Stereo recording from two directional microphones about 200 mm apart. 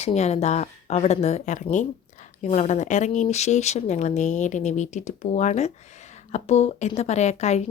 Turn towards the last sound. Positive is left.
turn(degrees=35)  # may be behind; listen again after turning